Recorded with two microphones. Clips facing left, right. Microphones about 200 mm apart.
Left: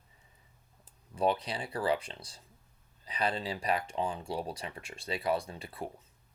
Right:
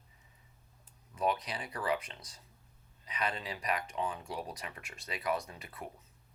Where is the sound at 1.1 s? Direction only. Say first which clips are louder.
Left 3 dB; 30° left (ahead or behind).